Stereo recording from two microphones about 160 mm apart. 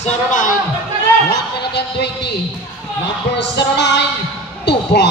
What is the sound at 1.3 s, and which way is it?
Speech, 90° left.